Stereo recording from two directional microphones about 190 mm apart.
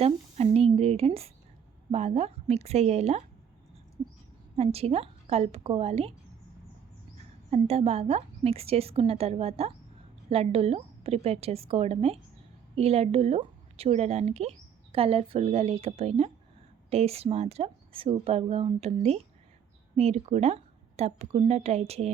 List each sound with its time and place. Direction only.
0.0 s a sound: 30° right (ahead or behind)
1.9 s speech: 35° right (ahead or behind)
4.5 s speech: 30° right (ahead or behind)
7.5 s speech: 35° right (ahead or behind)